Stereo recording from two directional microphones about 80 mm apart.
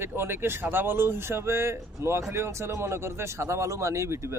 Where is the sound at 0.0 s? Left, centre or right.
Right.